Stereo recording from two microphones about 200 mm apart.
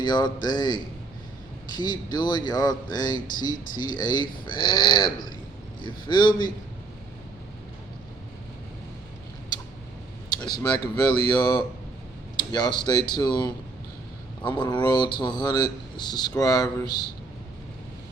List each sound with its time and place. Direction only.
0.0 s speech: 20° left (ahead or behind)
3.5 s speech: 40° left (ahead or behind)
3.9 s speech: 20° left (ahead or behind)
10.6 s speech: 20° left (ahead or behind)